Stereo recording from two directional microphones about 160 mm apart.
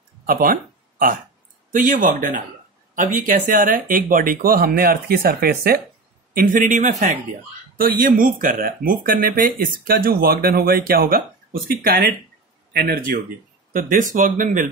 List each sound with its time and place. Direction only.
0.3 s a sound: 60° right (ahead or behind)
1.7 s speech: 55° right (ahead or behind)
6.3 s speech: 55° right (ahead or behind)
7.7 s speech: 60° right (ahead or behind)